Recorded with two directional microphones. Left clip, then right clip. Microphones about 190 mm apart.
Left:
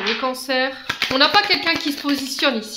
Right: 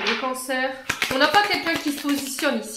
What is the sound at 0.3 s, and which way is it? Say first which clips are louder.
Speech: left 4 dB; 35° left (ahead or behind).